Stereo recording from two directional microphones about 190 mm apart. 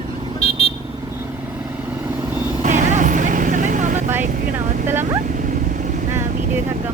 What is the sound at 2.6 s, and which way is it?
Vehicle, 40° right (ahead or behind).